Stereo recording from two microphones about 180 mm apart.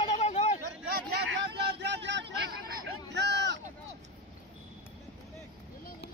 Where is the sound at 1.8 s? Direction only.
75° right (ahead or behind).